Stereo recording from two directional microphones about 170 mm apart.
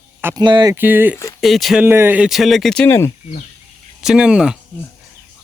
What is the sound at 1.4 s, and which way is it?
Speech, centre (ahead or behind).